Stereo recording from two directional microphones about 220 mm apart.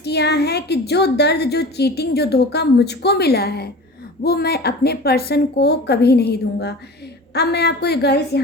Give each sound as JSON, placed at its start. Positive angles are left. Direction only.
{"t": 0.0, "sound": "a woman's voice", "side_deg": 50}